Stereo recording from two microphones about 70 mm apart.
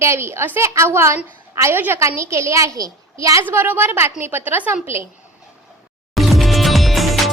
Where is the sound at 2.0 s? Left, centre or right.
Right.